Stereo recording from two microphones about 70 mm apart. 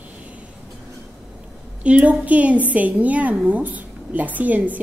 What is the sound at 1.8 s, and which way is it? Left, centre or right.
A woman's voice, centre.